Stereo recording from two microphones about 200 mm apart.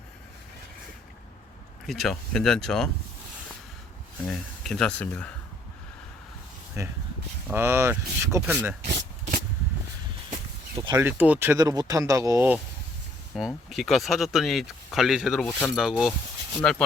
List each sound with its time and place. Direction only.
1.9 s speech: centre (ahead or behind)
4.3 s speech: centre (ahead or behind)
7.4 s speech: 10° right (ahead or behind)
10.9 s speech: 10° right (ahead or behind)
13.3 s speech: centre (ahead or behind)